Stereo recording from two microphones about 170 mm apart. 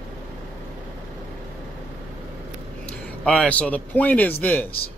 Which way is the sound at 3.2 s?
5° left (ahead or behind).